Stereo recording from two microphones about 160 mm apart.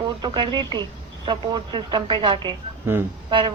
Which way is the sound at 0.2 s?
30° right (ahead or behind).